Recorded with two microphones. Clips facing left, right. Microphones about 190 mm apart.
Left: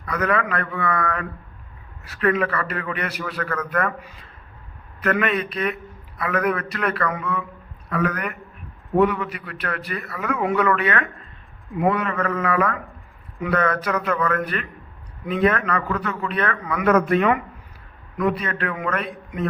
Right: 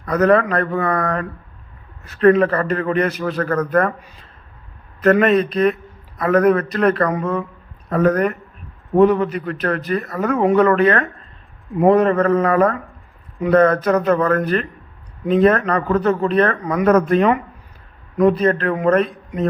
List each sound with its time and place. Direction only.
0.0 s a man's voice: 40° right (ahead or behind)
5.0 s a man's voice: 35° right (ahead or behind)